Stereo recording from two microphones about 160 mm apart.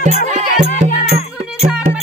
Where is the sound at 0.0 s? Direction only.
50° right (ahead or behind).